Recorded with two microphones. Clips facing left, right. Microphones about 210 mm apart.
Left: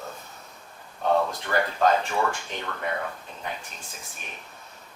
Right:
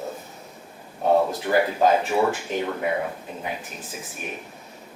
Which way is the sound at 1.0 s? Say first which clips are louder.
Right 4 dB; 10° right (ahead or behind).